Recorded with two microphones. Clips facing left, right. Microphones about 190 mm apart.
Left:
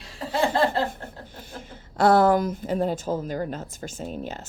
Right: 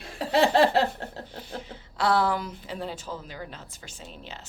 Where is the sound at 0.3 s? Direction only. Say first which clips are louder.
Right 2 dB; 75° right (ahead or behind).